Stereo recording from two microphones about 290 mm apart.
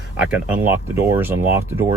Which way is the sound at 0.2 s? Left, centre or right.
Centre.